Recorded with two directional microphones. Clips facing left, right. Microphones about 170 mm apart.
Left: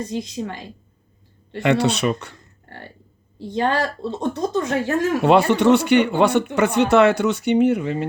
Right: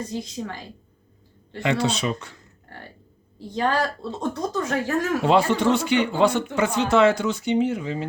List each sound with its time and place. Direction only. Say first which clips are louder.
0.1 s speech: left 4 dB; 20° left (ahead or behind)
1.6 s speech: left 5 dB; 70° left (ahead or behind)
3.4 s speech: left 2 dB; 20° left (ahead or behind)
5.2 s speech: left 5 dB; 70° left (ahead or behind)